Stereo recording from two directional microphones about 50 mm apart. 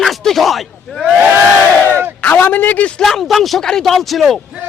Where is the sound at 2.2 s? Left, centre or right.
Left.